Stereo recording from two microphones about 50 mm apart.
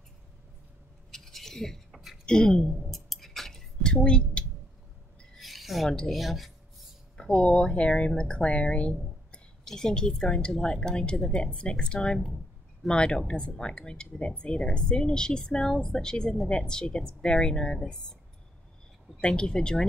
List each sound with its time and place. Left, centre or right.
1.1 s a sound: centre
2.2 s a woman's voice: centre
2.7 s music: centre
3.8 s a sound: centre
5.4 s a sound: centre
6.0 s speech: centre
7.2 s speech: centre
9.7 s a woman's voice: centre
19.1 s a woman's voice: centre